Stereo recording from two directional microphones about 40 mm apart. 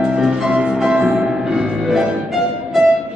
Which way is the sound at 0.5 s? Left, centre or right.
Right.